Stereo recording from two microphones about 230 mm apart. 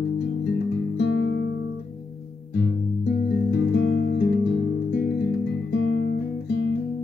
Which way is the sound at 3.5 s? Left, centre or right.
Left.